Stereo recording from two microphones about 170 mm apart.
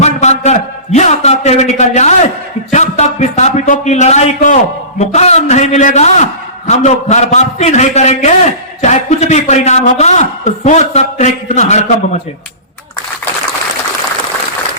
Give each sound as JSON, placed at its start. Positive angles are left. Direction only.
{"t": 0.0, "sound": "a man's voice", "side_deg": 40}